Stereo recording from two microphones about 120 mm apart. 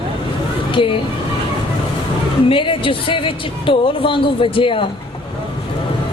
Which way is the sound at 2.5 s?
45° left (ahead or behind).